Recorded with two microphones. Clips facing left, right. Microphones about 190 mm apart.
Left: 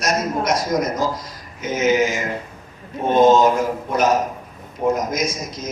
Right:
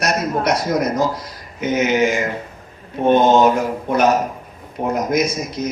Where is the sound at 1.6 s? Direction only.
65° right (ahead or behind).